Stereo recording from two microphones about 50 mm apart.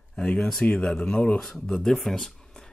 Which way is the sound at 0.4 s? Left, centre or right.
Centre.